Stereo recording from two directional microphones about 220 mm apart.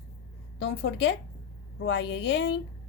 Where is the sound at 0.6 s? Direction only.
55° left (ahead or behind).